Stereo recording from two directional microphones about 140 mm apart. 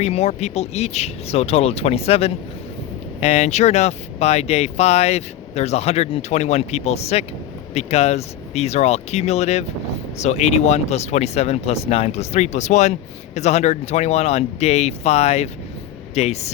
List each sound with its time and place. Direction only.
0.0 s speech: 50° left (ahead or behind)